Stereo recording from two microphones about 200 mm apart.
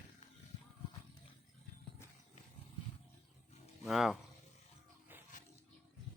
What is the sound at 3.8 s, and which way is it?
Speech, centre (ahead or behind).